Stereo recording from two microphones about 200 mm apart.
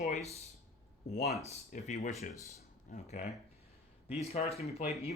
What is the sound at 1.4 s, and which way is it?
Speech, 35° left (ahead or behind).